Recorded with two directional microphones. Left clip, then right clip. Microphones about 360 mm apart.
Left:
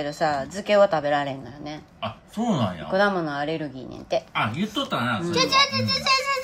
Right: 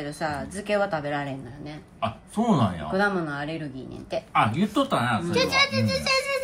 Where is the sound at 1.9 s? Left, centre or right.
Centre.